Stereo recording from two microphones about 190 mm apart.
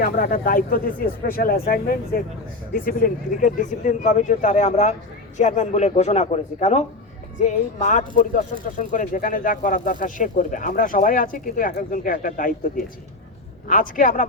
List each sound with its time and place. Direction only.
0.0 s speech: 50° left (ahead or behind)